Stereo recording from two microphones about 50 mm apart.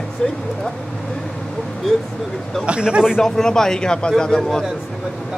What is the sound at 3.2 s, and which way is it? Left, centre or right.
A man's voice, centre.